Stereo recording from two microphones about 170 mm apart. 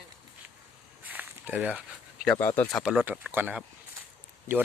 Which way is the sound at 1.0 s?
10° right (ahead or behind).